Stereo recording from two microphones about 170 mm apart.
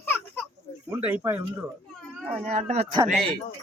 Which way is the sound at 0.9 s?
10° right (ahead or behind).